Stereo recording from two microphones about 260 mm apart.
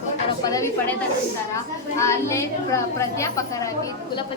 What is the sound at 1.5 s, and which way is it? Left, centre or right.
A woman's voice, centre.